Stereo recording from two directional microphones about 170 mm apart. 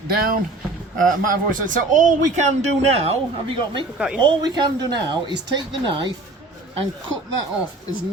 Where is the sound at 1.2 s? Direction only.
55° right (ahead or behind); by 6.0 s 30° right (ahead or behind).